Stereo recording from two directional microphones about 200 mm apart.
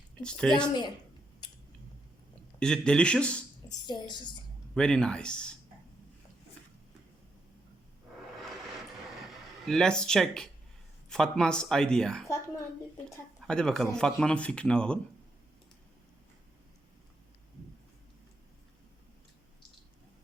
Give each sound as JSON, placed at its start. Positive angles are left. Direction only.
{"t": 0.2, "sound": "speech", "side_deg": 5}
{"t": 2.6, "sound": "speech", "side_deg": 5}
{"t": 3.7, "sound": "speech", "side_deg": 20}
{"t": 4.7, "sound": "speech", "side_deg": 5}
{"t": 8.4, "sound": "vehicle", "side_deg": 0}
{"t": 9.6, "sound": "speech", "side_deg": 5}